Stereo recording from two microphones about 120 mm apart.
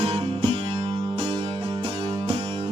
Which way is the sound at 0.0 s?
50° right (ahead or behind).